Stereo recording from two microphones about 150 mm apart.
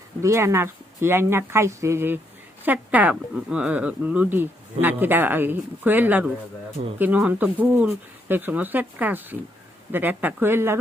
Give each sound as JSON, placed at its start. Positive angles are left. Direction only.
{"t": 0.2, "sound": "speech", "side_deg": -20}